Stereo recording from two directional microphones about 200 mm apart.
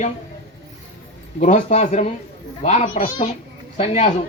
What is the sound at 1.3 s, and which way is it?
Speech, 40° left (ahead or behind).